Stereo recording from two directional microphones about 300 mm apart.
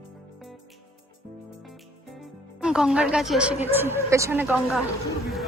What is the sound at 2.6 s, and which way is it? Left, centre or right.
A woman's voice, centre.